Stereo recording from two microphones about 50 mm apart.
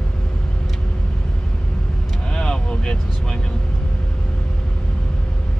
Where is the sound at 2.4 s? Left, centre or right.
Centre.